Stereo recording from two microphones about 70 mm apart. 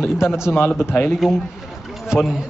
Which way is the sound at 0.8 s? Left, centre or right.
Left.